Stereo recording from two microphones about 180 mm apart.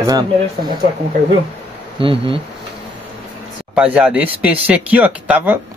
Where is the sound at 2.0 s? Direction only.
30° right (ahead or behind).